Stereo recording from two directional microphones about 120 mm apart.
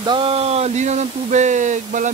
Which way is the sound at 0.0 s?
45° right (ahead or behind).